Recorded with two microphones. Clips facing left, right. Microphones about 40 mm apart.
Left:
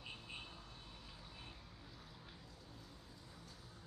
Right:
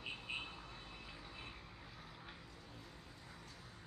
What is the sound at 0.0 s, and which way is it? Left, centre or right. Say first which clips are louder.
Vehicle: right 6 dB; right.